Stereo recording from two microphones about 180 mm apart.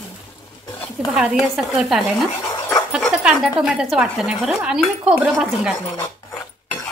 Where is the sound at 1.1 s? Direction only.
Centre (ahead or behind).